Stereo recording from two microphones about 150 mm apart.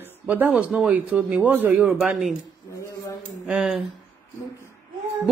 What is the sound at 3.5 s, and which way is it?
Speech, 5° right (ahead or behind).